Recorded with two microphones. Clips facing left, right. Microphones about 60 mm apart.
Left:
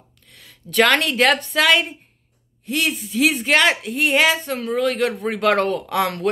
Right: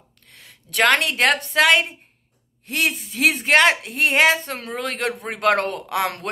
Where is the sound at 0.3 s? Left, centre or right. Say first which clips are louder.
Even; right.